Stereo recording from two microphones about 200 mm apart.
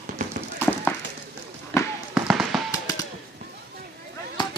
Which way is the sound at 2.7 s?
20° left (ahead or behind).